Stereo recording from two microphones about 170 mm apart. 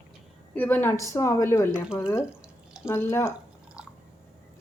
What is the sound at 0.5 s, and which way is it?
A woman's voice, 10° left (ahead or behind).